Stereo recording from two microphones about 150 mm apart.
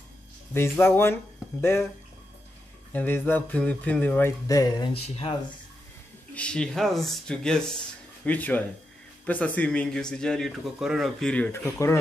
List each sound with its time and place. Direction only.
0.6 s speech: 15° left (ahead or behind)
2.9 s speech: 10° left (ahead or behind)
4.5 s speech: 25° left (ahead or behind)
4.9 s speech: 45° left (ahead or behind)
6.3 s speech: 5° left (ahead or behind)